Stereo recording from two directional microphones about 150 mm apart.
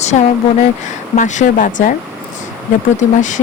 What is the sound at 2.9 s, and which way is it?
Speech, 55° left (ahead or behind).